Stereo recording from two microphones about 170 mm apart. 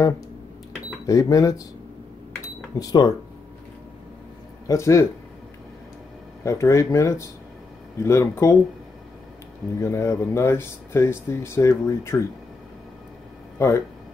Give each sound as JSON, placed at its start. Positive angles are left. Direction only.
{"t": 1.0, "sound": "speech", "side_deg": 20}
{"t": 2.8, "sound": "speech", "side_deg": 20}
{"t": 4.6, "sound": "speech", "side_deg": 15}
{"t": 6.4, "sound": "speech", "side_deg": 20}
{"t": 9.8, "sound": "speech", "side_deg": 15}
{"t": 13.6, "sound": "speech", "side_deg": 15}